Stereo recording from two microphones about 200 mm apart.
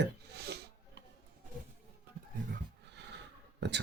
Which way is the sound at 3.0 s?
60° right (ahead or behind).